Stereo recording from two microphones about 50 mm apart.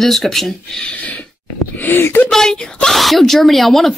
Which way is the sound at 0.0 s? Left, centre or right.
Centre.